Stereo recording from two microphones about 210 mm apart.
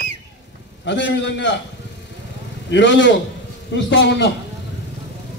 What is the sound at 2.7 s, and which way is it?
A man's voice, 60° left (ahead or behind).